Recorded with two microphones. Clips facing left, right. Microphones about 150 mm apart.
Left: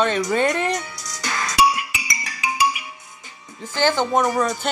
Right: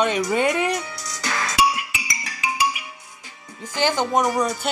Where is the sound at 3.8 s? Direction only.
15° right (ahead or behind).